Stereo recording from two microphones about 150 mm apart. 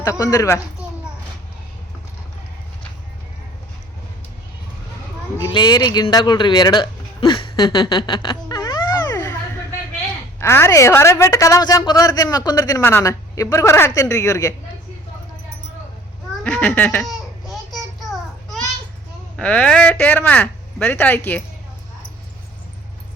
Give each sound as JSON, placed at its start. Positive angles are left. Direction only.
{"t": 0.0, "sound": "a woman's voice", "side_deg": 20}
{"t": 5.4, "sound": "a man's voice", "side_deg": 30}
{"t": 10.4, "sound": "a woman's voice", "side_deg": 15}
{"t": 16.4, "sound": "speech", "side_deg": 10}
{"t": 19.4, "sound": "speech", "side_deg": 10}